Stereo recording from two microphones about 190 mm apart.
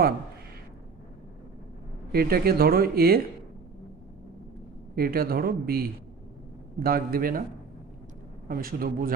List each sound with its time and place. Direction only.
2.1 s speech: 55° right (ahead or behind)
4.9 s speech: 50° right (ahead or behind)
8.4 s speech: 50° right (ahead or behind)